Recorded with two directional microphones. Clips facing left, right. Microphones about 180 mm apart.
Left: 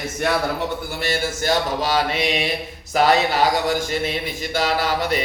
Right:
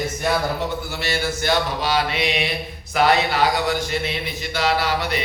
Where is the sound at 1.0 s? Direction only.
45° left (ahead or behind).